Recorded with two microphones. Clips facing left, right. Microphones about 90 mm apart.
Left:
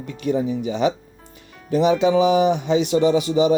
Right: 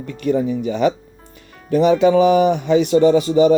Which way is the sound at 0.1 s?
55° right (ahead or behind).